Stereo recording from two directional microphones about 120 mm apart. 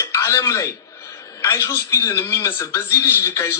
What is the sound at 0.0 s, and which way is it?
A man's voice, 25° left (ahead or behind).